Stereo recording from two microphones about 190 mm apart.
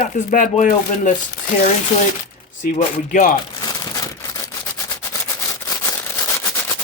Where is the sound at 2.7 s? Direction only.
40° left (ahead or behind).